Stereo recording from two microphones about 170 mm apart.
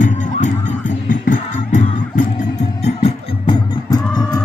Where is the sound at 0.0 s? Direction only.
50° left (ahead or behind).